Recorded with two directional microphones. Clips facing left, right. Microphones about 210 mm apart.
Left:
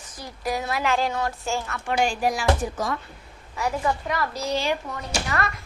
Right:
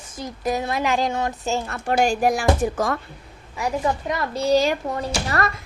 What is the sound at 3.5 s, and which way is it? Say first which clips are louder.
Speech: right 2 dB; 20° right (ahead or behind).